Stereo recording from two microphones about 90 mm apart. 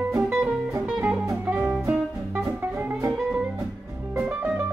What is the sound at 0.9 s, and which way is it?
Music, 10° right (ahead or behind).